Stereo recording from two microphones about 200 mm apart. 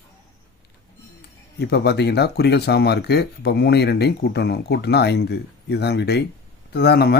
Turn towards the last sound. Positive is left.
turn(degrees=50)  # may be behind; listen again after turning